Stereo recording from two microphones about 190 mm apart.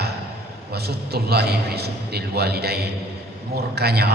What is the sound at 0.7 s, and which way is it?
A man's voice, 55° right (ahead or behind).